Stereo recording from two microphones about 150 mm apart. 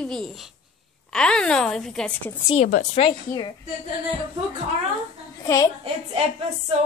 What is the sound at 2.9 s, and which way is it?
Speech, 35° left (ahead or behind).